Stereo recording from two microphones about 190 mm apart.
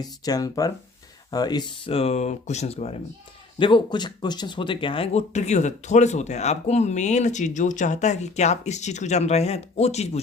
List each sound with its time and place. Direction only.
0.0 s speech: 20° left (ahead or behind); by 10.1 s 35° left (ahead or behind)